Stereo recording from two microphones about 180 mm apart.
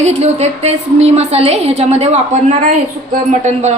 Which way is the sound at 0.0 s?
40° right (ahead or behind).